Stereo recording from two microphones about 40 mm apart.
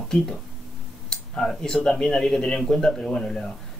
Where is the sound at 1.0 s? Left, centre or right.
Centre.